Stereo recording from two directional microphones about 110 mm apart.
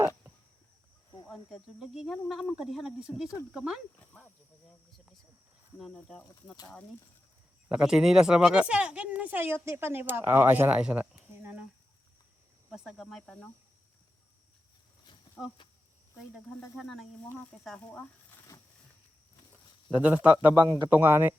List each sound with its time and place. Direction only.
1.3 s speech: centre (ahead or behind)
5.9 s speech: 10° left (ahead or behind)
7.7 s speech: 10° right (ahead or behind)
12.7 s speech: centre (ahead or behind)
16.7 s speech: centre (ahead or behind)
19.9 s speech: 10° right (ahead or behind)
20.7 s a man's voice: 40° right (ahead or behind)
20.9 s speech: 15° right (ahead or behind)